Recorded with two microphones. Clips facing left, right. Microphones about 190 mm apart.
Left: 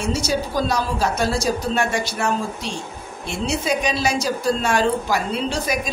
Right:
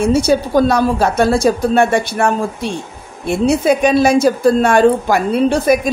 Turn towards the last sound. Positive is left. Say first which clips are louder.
# right 11 dB
turn(degrees=-55)  # may be behind; listen again after turning